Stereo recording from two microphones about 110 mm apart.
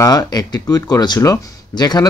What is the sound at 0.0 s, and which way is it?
Speech, 35° left (ahead or behind).